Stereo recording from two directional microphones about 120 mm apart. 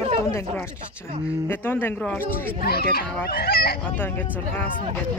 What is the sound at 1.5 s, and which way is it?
Speech, 15° left (ahead or behind).